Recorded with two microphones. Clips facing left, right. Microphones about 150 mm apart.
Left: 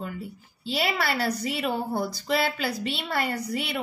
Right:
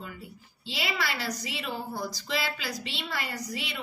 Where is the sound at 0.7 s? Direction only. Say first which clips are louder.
Left 6 dB; 45° left (ahead or behind).